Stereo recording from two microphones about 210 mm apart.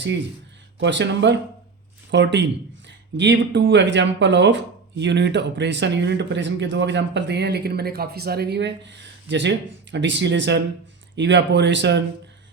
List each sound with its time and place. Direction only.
0.8 s speech: 60° right (ahead or behind)